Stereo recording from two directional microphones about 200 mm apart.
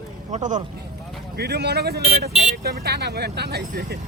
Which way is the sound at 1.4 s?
55° right (ahead or behind).